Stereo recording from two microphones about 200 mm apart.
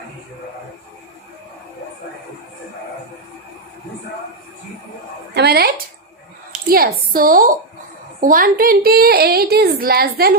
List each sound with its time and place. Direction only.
5.3 s speech: 55° right (ahead or behind)